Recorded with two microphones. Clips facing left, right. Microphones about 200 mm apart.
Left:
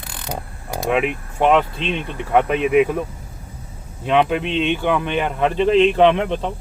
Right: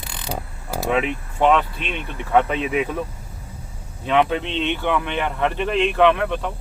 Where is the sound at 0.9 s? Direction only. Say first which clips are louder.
Left 2 dB; 10° left (ahead or behind).